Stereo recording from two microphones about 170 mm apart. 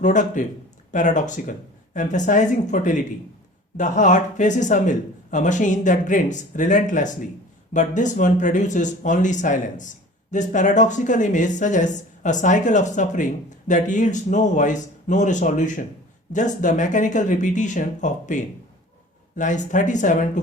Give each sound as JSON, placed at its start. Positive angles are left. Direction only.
{"t": 0.0, "sound": "speech", "side_deg": 50}